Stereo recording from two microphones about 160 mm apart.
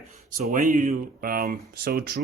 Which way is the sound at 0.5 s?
55° right (ahead or behind).